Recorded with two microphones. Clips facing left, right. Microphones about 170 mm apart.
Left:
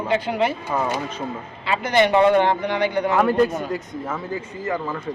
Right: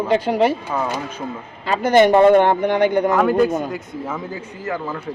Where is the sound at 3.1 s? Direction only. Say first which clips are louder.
Right 2 dB; centre (ahead or behind).